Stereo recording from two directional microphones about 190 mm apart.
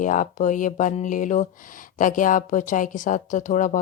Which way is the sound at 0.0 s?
45° left (ahead or behind).